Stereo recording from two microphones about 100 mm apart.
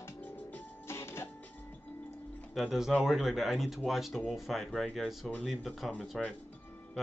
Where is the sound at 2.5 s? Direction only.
5° right (ahead or behind).